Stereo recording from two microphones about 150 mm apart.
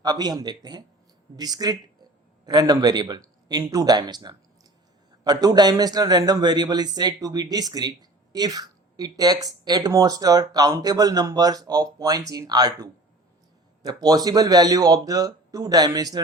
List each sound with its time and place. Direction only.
0.0 s a man's voice: 25° right (ahead or behind)